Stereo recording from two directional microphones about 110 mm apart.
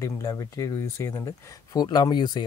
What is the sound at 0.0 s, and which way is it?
Speech, 30° left (ahead or behind).